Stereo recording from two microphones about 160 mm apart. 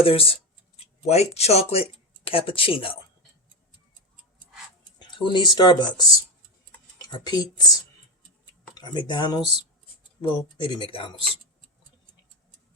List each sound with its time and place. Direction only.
0.0 s speech: 35° left (ahead or behind)
4.9 s speech: 30° left (ahead or behind)
6.7 s tick-tock: 10° left (ahead or behind)
7.1 s speech: 25° left (ahead or behind)
8.8 s speech: 30° left (ahead or behind)
9.4 s speech: 40° right (ahead or behind)
10.2 s speech: 30° left (ahead or behind)